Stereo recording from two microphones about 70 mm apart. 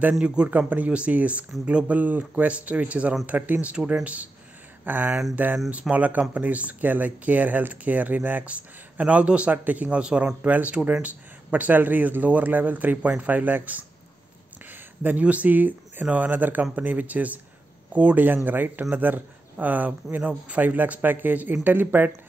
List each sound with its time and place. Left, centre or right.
0.2 s speech: centre